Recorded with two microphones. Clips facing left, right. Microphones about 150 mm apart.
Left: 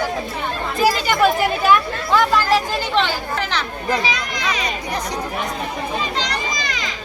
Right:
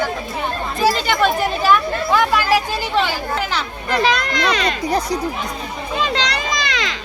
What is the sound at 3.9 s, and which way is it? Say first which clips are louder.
Speech: right 5 dB; 70° right (ahead or behind).